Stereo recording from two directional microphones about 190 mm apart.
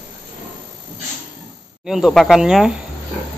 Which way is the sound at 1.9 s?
Centre (ahead or behind).